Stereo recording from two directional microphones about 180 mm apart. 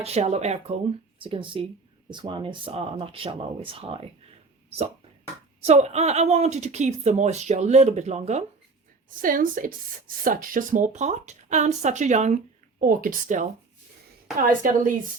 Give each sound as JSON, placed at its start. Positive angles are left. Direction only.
{"t": 0.0, "sound": "speech", "side_deg": -35}
{"t": 5.6, "sound": "speech", "side_deg": -35}
{"t": 9.0, "sound": "speech", "side_deg": -50}